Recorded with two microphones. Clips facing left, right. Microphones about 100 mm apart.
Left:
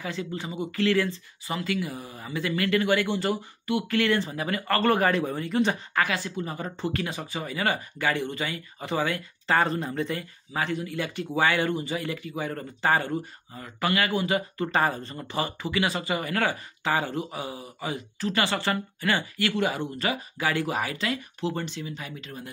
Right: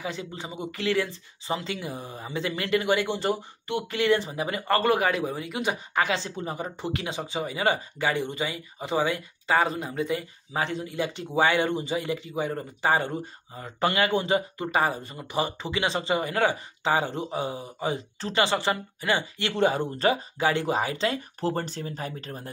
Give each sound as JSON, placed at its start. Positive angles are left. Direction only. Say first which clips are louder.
{"t": 0.0, "sound": "speech", "louder": "left 1 dB", "side_deg": -20}
{"t": 4.9, "sound": "speech", "louder": "left 1 dB", "side_deg": -5}
{"t": 5.9, "sound": "speech", "louder": "right 3 dB", "side_deg": -25}
{"t": 14.7, "sound": "speech", "louder": "right 1 dB", "side_deg": -10}